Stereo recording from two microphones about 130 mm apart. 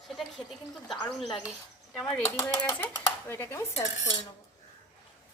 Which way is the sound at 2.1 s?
15° left (ahead or behind).